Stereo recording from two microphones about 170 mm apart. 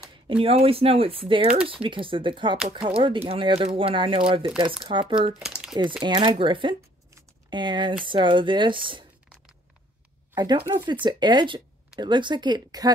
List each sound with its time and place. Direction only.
0.1 s speech: 35° right (ahead or behind)
5.3 s crumpling: 5° right (ahead or behind)
6.0 s speech: 30° right (ahead or behind)
7.2 s a sound: 25° right (ahead or behind)
8.0 s speech: 30° right (ahead or behind)
10.3 s speech: 25° right (ahead or behind)